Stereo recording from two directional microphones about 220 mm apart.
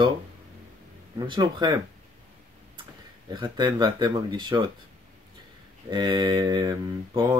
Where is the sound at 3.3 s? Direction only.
20° right (ahead or behind).